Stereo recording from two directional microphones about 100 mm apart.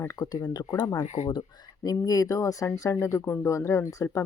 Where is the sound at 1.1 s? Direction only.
55° left (ahead or behind).